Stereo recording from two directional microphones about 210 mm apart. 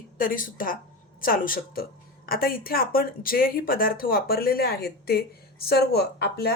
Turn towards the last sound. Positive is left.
turn(degrees=50)  # may be behind; listen again after turning